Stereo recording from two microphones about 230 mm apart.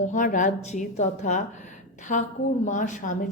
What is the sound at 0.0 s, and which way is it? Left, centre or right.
A woman's voice, left.